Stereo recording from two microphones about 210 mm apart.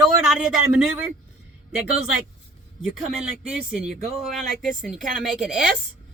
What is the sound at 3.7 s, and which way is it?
Speech, 5° right (ahead or behind).